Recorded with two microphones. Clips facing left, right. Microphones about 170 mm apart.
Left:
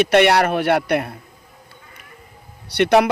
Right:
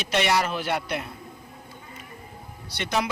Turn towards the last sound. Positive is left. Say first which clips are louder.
# left 12 dB
turn(degrees=65)  # may be behind; listen again after turning